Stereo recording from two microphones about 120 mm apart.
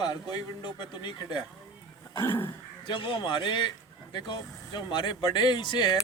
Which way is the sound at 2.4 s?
45° left (ahead or behind).